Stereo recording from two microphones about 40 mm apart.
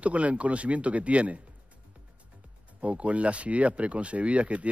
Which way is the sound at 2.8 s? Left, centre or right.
Right.